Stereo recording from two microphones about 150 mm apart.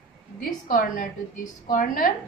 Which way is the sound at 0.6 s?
60° left (ahead or behind).